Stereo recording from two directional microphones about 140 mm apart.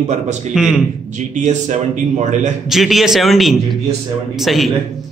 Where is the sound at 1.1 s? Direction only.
60° right (ahead or behind).